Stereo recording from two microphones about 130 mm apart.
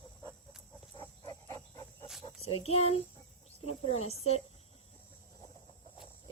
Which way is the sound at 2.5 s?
50° left (ahead or behind).